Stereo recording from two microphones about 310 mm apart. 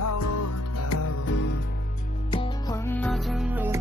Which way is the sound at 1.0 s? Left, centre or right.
Left.